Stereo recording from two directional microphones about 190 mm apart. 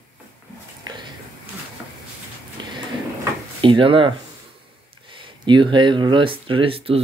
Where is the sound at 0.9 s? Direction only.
25° right (ahead or behind).